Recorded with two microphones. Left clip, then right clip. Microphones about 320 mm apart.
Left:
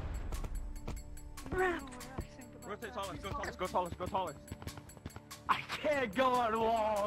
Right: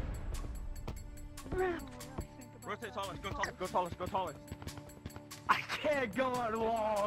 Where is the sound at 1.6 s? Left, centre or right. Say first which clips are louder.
Left 2 dB; centre.